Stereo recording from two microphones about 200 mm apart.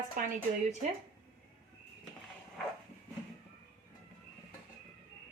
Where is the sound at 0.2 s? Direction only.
45° right (ahead or behind).